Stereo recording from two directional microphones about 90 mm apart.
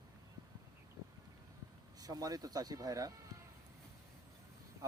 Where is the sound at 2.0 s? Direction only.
45° right (ahead or behind).